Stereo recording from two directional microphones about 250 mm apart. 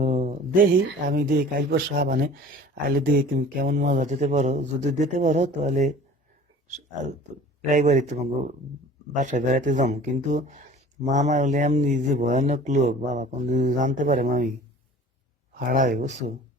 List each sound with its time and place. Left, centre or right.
0.0 s speech: right
7.7 s speech: right
15.5 s speech: right